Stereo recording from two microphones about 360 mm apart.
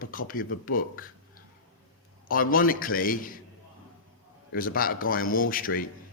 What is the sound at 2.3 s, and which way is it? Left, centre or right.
Speech, left.